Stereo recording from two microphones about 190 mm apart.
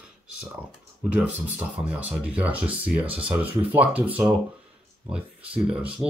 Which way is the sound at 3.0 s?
30° right (ahead or behind).